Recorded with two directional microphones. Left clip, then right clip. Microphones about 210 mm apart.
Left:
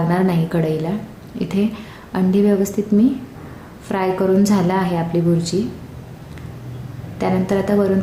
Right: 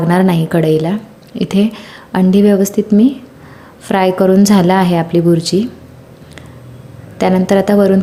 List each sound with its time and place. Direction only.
0.1 s a woman's voice: 35° right (ahead or behind)
7.2 s a woman's voice: 35° right (ahead or behind)